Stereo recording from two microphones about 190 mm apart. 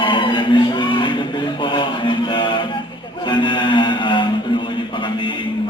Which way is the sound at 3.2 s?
25° left (ahead or behind).